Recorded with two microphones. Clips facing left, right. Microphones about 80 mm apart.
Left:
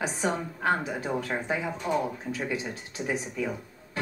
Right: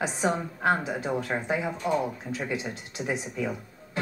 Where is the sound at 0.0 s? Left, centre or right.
Right.